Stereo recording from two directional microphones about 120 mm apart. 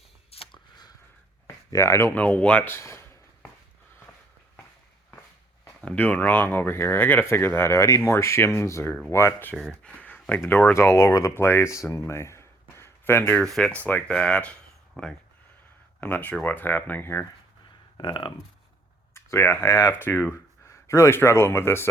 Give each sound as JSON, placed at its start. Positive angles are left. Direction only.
{"t": 0.3, "sound": "a sound", "side_deg": 50}
{"t": 1.7, "sound": "speech", "side_deg": 25}
{"t": 5.8, "sound": "speech", "side_deg": 10}
{"t": 9.6, "sound": "speech", "side_deg": 5}
{"t": 11.9, "sound": "a sound", "side_deg": 20}
{"t": 13.4, "sound": "speech", "side_deg": 10}
{"t": 17.9, "sound": "speech", "side_deg": 40}
{"t": 19.1, "sound": "speech", "side_deg": 20}